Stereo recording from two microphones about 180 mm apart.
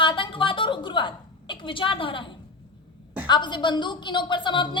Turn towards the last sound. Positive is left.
turn(degrees=25)  # may be behind; listen again after turning